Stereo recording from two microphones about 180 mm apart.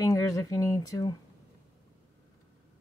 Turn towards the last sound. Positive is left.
turn(degrees=20)  # may be behind; listen again after turning